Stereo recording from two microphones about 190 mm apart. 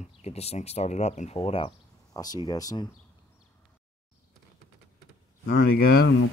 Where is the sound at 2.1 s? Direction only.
20° left (ahead or behind).